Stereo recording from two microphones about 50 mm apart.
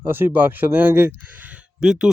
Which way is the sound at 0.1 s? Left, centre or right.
Right.